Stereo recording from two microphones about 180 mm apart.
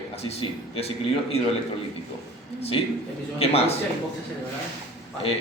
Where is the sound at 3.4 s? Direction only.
35° left (ahead or behind).